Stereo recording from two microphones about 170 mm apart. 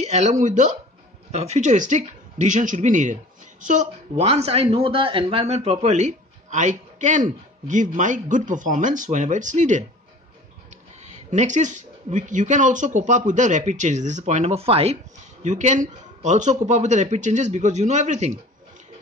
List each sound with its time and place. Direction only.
0.0 s speech: 40° right (ahead or behind)